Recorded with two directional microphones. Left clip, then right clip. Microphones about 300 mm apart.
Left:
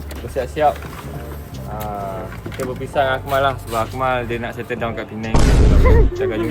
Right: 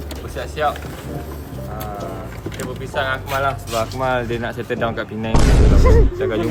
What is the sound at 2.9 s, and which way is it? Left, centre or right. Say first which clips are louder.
Speech: left 4 dB; left.